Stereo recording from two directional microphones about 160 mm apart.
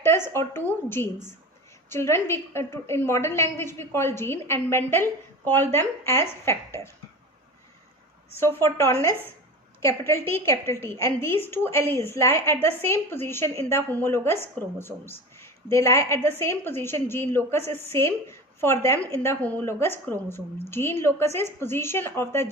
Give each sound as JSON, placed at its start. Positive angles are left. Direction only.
{"t": 0.4, "sound": "a woman's voice", "side_deg": 20}
{"t": 8.3, "sound": "a woman's voice", "side_deg": 15}